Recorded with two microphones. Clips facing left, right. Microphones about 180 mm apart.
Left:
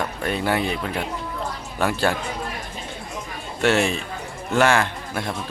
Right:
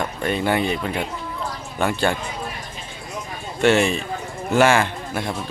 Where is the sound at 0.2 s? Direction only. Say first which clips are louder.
Right 3 dB; centre (ahead or behind).